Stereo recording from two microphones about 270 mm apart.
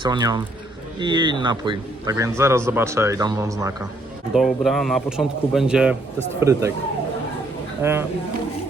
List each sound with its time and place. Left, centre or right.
0.0 s a man's voice: centre
4.4 s a man's voice: centre
7.8 s speech: centre